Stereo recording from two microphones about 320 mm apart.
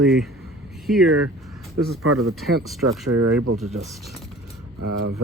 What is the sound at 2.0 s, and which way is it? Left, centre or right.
Speech, right.